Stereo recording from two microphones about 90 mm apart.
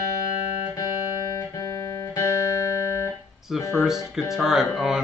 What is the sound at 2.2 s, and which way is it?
Music, 35° left (ahead or behind).